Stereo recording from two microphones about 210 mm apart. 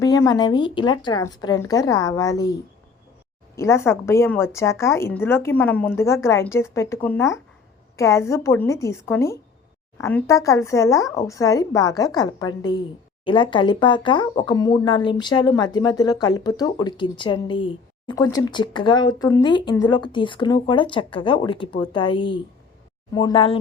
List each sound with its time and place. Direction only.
0.0 s a woman's voice: 15° left (ahead or behind)